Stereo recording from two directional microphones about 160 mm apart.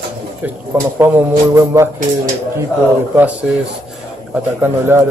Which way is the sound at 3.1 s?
10° right (ahead or behind).